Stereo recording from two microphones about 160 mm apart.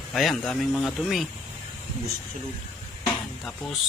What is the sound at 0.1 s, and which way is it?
Speech, centre (ahead or behind).